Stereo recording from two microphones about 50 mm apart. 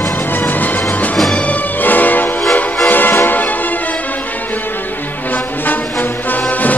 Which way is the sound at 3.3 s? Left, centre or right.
Left.